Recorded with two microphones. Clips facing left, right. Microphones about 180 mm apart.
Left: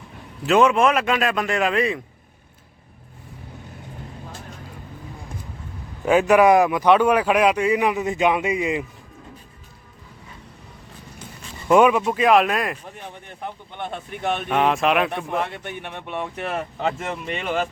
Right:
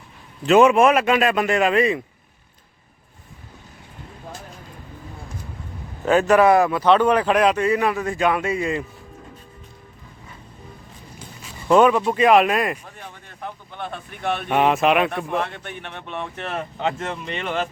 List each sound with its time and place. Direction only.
0.4 s speech: 5° right (ahead or behind)
6.1 s speech: 10° left (ahead or behind)
11.7 s speech: 10° left (ahead or behind)
13.0 s a man's voice: 20° left (ahead or behind)
14.5 s speech: 5° right (ahead or behind)
15.3 s speech: 10° left (ahead or behind)